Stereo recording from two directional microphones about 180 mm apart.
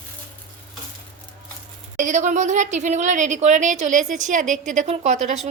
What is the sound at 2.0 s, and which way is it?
A woman's voice, 45° right (ahead or behind).